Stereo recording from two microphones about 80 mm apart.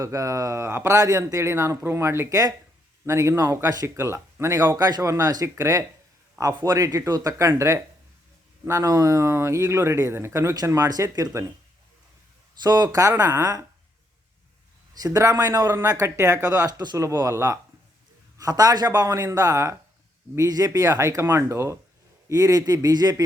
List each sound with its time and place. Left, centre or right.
0.0 s speech: right
3.8 s speech: right
4.8 s a man's voice: right
10.7 s a man's voice: right
11.3 s speech: right
12.6 s a man's voice: right
15.0 s a man's voice: right
15.9 s a man's voice: right
17.0 s a man's voice: right
21.2 s speech: right
22.3 s a man's voice: right